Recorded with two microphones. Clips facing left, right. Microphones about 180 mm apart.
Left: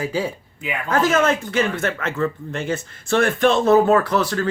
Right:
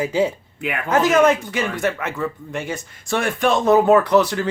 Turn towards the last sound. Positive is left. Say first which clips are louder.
# right 3 dB
turn(degrees=-20)  # may be behind; listen again after turning